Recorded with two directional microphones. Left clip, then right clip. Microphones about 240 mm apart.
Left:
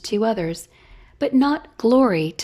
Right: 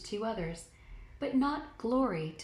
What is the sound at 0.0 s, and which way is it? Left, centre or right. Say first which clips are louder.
Speech: left 15 dB; left.